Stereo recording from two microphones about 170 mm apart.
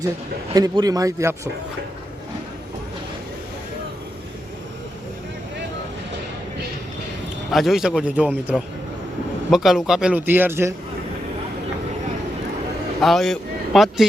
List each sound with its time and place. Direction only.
0.5 s speech: 20° right (ahead or behind)
7.5 s a man's voice: centre (ahead or behind)
13.0 s a man's voice: centre (ahead or behind)